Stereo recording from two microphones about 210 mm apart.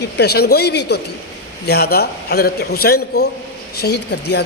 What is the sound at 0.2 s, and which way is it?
A man's voice, 50° left (ahead or behind).